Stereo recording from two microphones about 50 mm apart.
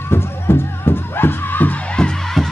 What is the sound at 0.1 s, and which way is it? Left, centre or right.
Music, left.